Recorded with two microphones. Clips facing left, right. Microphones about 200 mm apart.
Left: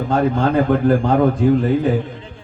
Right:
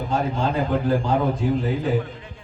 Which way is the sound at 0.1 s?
60° left (ahead or behind).